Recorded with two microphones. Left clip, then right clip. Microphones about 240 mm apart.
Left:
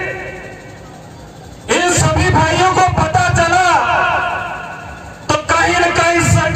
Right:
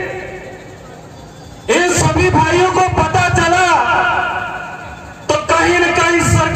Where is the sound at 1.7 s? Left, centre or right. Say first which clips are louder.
Right 1 dB; left.